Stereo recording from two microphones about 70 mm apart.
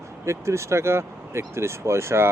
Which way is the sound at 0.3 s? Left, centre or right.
Right.